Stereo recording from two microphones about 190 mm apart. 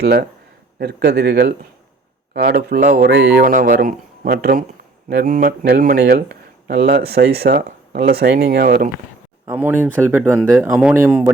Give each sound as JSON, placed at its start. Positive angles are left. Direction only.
{"t": 0.0, "sound": "speech", "side_deg": -60}
{"t": 9.5, "sound": "speech", "side_deg": -10}